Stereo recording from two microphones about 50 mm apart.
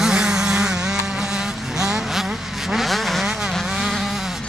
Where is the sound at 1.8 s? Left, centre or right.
Centre.